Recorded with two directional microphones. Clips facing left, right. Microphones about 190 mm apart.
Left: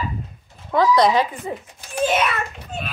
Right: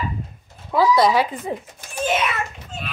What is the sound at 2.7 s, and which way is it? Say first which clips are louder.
Children playing: left 3 dB; 60° left (ahead or behind).